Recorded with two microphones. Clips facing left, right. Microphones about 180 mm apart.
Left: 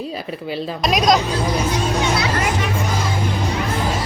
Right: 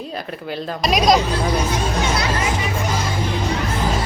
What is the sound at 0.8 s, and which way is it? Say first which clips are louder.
Speech: right 1 dB; centre (ahead or behind).